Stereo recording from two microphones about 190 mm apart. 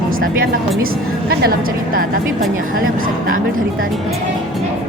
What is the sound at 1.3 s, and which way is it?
A woman's voice, 55° right (ahead or behind).